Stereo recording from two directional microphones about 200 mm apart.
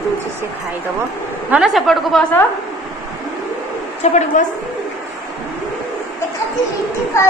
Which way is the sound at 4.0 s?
35° left (ahead or behind).